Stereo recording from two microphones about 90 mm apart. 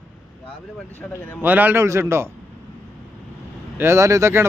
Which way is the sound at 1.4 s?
20° right (ahead or behind).